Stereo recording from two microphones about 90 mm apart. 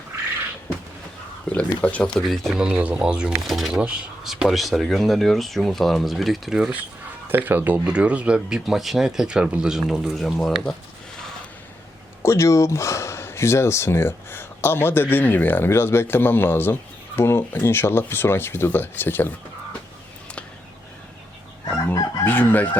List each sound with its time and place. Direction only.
1.5 s speech: 15° left (ahead or behind)
2.3 s speech: centre (ahead or behind)
2.6 s speech: 10° right (ahead or behind)
7.3 s speech: 20° right (ahead or behind); by 10.8 s 5° left (ahead or behind)
12.2 s speech: 30° left (ahead or behind)
22.2 s speech: 20° left (ahead or behind)